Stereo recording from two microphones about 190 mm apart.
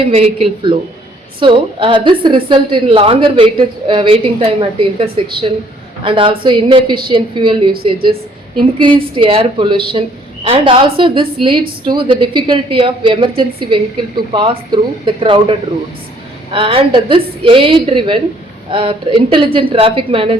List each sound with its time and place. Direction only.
0.0 s a woman's voice: 30° right (ahead or behind)
9.0 s a woman's voice: 25° right (ahead or behind)